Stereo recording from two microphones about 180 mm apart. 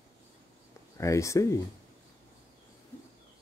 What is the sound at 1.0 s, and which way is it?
Speech, 15° left (ahead or behind).